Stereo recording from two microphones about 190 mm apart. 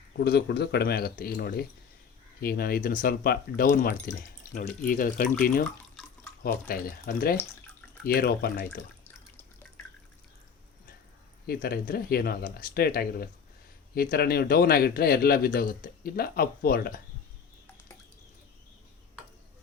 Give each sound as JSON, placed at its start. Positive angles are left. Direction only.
{"t": 0.2, "sound": "speech", "side_deg": 60}
{"t": 6.4, "sound": "speech", "side_deg": 50}
{"t": 11.4, "sound": "speech", "side_deg": 55}